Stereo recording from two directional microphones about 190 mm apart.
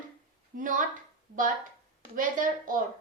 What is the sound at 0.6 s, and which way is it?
Speech, 45° right (ahead or behind).